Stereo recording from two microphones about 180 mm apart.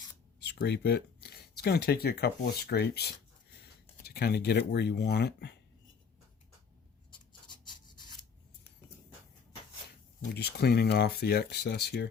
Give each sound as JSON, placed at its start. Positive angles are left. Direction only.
{"t": 0.3, "sound": "speech", "side_deg": 65}
{"t": 7.1, "sound": "rub", "side_deg": 25}
{"t": 10.3, "sound": "speech", "side_deg": 65}